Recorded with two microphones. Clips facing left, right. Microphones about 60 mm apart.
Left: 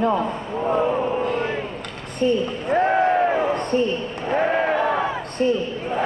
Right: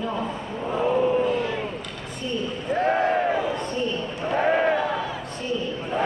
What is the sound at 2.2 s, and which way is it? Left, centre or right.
Speech, left.